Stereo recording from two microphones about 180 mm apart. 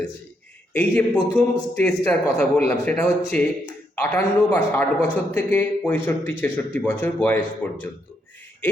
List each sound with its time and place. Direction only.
0.7 s a man's voice: 10° left (ahead or behind)